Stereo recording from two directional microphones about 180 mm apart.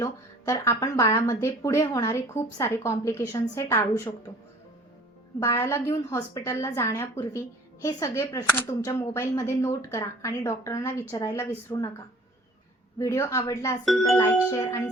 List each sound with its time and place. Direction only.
0.0 s a woman's voice: 15° left (ahead or behind)
5.4 s a woman's voice: 15° left (ahead or behind)
13.0 s a woman's voice: 15° left (ahead or behind)